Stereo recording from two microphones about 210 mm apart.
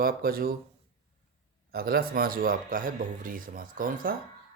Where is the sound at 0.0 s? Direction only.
45° right (ahead or behind).